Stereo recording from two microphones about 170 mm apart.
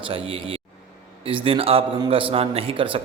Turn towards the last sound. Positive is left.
turn(degrees=-30)  # may be behind; listen again after turning